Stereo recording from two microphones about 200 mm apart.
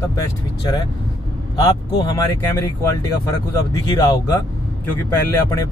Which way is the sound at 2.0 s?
15° left (ahead or behind).